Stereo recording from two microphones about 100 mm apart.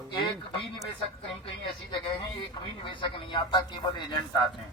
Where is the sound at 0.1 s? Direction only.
50° left (ahead or behind).